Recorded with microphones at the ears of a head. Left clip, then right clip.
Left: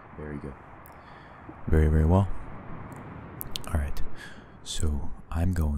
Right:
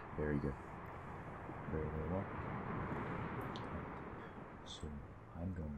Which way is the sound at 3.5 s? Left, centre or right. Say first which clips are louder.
Left 9 dB; left.